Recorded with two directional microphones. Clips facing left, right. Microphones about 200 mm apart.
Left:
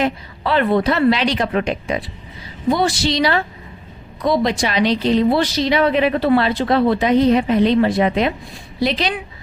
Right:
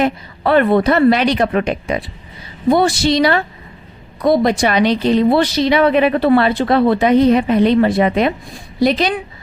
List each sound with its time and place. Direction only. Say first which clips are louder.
0.0 s a woman's voice: right 4 dB; 55° right (ahead or behind)